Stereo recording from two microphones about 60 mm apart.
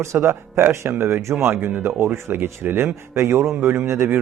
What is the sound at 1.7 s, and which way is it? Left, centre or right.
Speech, right.